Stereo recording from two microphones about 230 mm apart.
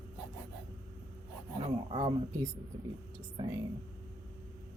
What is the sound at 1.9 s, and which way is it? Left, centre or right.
Speech, right.